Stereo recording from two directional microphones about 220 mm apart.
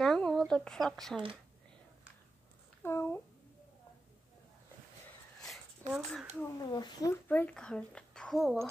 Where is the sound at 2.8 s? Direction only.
10° left (ahead or behind).